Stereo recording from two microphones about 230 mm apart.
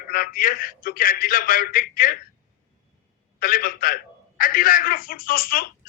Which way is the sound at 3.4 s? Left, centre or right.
Left.